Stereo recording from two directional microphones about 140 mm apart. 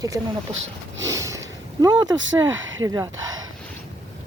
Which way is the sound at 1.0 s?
25° right (ahead or behind).